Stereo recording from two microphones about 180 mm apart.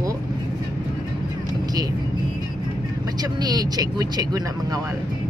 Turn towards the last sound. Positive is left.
turn(degrees=-20)  # may be behind; listen again after turning